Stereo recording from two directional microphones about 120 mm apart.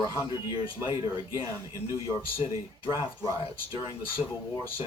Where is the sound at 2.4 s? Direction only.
50° left (ahead or behind).